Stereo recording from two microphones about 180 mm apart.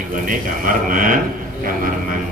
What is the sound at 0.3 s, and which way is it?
Speech, 50° right (ahead or behind).